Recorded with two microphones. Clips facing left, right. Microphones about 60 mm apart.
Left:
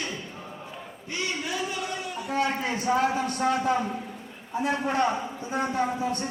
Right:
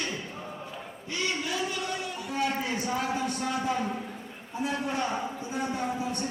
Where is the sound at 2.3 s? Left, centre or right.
Left.